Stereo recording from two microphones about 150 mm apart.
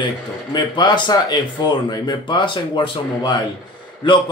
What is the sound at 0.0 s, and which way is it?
Speech, 30° left (ahead or behind).